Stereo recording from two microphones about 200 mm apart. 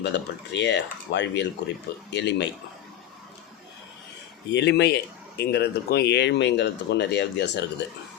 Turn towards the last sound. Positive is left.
turn(degrees=60)  # may be behind; listen again after turning